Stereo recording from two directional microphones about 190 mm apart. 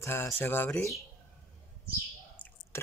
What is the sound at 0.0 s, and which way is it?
Speech, 15° left (ahead or behind).